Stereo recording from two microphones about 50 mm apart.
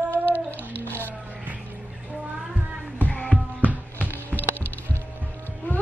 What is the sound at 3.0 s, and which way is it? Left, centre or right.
Music, left.